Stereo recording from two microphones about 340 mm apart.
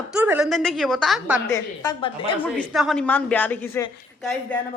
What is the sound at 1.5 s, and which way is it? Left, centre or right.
Speech, centre.